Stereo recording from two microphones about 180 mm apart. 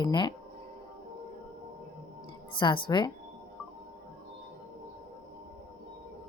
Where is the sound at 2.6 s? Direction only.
25° left (ahead or behind).